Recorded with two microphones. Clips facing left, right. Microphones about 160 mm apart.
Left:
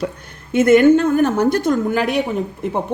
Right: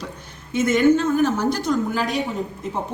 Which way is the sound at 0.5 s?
60° left (ahead or behind).